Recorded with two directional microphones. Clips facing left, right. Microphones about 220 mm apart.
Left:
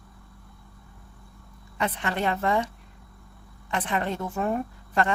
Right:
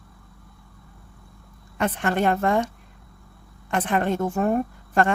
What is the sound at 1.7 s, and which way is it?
Speech, 50° right (ahead or behind).